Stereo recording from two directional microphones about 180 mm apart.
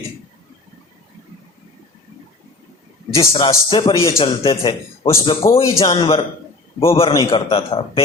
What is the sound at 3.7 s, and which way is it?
A man's voice, 30° left (ahead or behind).